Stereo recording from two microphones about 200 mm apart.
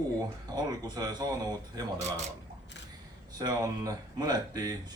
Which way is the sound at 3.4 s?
20° right (ahead or behind).